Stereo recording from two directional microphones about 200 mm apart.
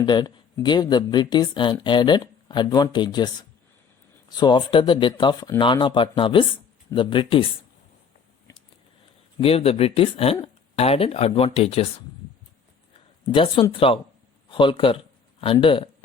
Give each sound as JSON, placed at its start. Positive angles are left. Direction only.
{"t": 0.0, "sound": "speech", "side_deg": 20}
{"t": 4.3, "sound": "speech", "side_deg": 20}
{"t": 9.4, "sound": "speech", "side_deg": 30}
{"t": 13.3, "sound": "speech", "side_deg": 25}